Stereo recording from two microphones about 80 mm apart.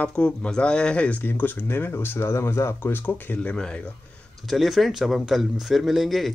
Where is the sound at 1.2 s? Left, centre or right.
Left.